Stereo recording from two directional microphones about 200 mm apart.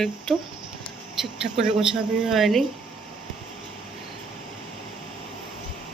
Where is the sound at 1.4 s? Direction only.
40° right (ahead or behind).